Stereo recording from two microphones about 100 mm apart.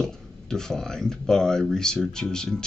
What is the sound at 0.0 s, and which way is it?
Speech, 5° left (ahead or behind).